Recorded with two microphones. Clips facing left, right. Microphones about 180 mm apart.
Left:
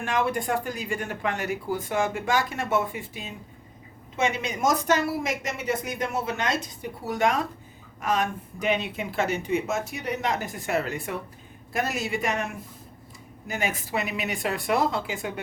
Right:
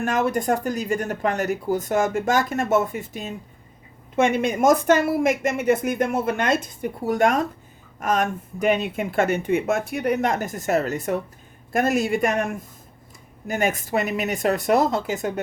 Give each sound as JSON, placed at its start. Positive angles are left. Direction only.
{"t": 0.0, "sound": "speech", "side_deg": -45}